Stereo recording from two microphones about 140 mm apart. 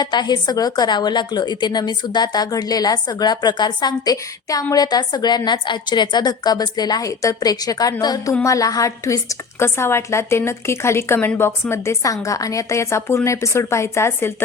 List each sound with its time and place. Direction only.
0.0 s a woman's voice: 30° left (ahead or behind)